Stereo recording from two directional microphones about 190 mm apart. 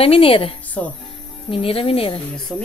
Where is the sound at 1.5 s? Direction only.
30° left (ahead or behind).